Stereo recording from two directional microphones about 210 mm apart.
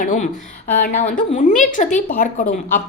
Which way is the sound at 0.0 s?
40° left (ahead or behind).